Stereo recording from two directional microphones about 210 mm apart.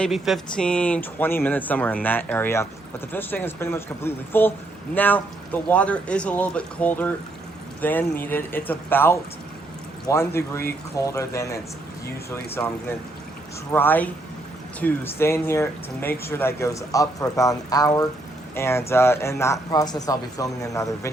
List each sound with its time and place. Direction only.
0.0 s speech: centre (ahead or behind)
13.7 s speech: 10° left (ahead or behind)